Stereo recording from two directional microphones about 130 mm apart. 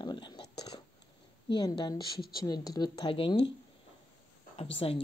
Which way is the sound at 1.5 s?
35° left (ahead or behind).